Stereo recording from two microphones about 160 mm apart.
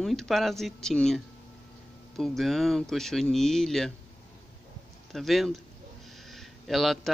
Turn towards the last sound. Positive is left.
turn(degrees=0)  # may be behind; listen again after turning